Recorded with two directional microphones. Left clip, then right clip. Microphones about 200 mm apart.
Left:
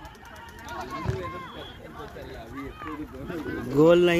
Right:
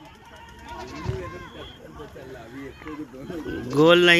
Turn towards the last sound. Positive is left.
turn(degrees=10)  # may be behind; listen again after turning